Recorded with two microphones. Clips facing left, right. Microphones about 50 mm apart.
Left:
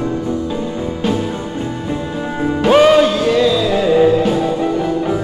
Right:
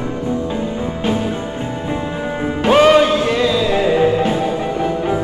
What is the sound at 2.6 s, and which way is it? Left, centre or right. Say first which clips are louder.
Music: left 1 dB; right.